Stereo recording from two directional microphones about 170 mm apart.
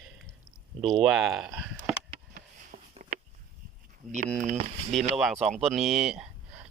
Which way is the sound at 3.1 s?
50° right (ahead or behind).